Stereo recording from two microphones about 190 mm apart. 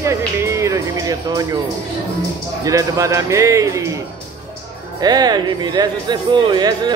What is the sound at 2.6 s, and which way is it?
Speech, 15° right (ahead or behind).